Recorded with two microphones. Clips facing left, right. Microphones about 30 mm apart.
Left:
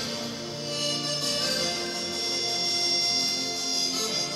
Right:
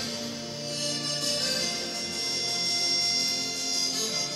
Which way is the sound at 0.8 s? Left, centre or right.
Centre.